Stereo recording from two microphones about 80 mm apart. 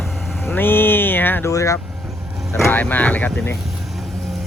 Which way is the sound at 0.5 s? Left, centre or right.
Left.